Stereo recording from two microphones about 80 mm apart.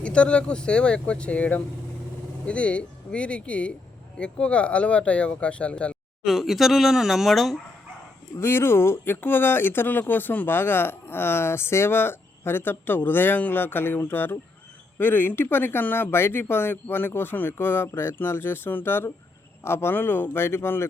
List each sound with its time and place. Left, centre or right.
0.0 s speech: centre
6.2 s speech: centre
8.4 s speech: left